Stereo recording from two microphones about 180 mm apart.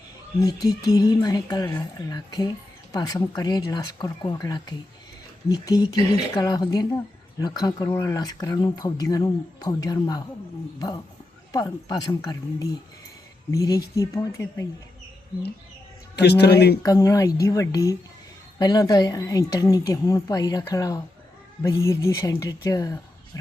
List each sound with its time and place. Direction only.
0.3 s speech: 20° left (ahead or behind)
16.1 s speech: 65° left (ahead or behind)
16.8 s speech: 20° left (ahead or behind)